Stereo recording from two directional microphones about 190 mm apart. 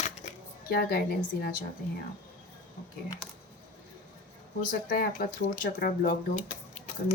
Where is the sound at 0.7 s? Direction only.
50° left (ahead or behind).